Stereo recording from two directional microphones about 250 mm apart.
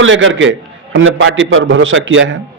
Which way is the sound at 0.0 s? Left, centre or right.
Right.